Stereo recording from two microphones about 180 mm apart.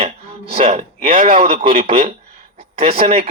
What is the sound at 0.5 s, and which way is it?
Speech, 35° right (ahead or behind).